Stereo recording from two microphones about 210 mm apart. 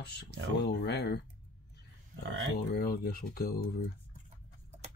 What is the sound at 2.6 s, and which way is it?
Speech, 45° left (ahead or behind).